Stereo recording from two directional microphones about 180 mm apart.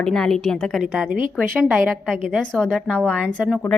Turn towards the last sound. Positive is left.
turn(degrees=5)  # may be behind; listen again after turning